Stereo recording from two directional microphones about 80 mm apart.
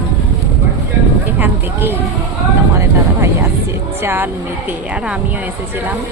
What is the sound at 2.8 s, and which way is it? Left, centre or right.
Speech, right.